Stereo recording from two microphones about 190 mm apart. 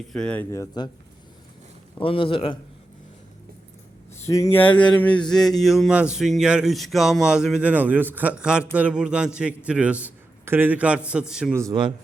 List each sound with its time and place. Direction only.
0.1 s speech: 5° left (ahead or behind)
2.0 s a man's voice: 30° left (ahead or behind)
4.2 s speech: 15° left (ahead or behind); by 11.5 s 5° right (ahead or behind)
11.5 s a man's voice: 20° right (ahead or behind)